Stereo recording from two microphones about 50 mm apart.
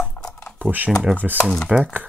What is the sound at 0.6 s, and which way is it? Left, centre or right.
Speech, right.